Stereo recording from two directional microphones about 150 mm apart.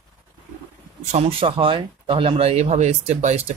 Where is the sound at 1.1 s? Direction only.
40° right (ahead or behind).